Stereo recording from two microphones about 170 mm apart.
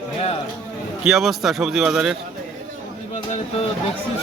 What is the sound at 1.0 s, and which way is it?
Speech, centre (ahead or behind).